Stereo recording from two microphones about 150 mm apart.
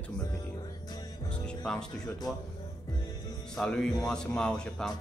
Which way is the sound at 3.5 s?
5° left (ahead or behind).